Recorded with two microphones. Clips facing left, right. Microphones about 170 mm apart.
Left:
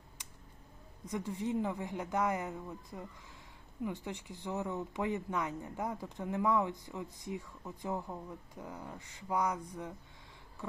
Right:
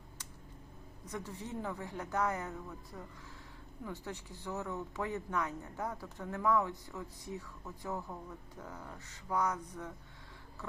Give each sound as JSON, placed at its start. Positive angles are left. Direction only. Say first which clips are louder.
{"t": 1.0, "sound": "speech", "louder": "left 7 dB", "side_deg": 15}